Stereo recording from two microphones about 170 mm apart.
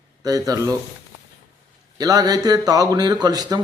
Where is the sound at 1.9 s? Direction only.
20° right (ahead or behind).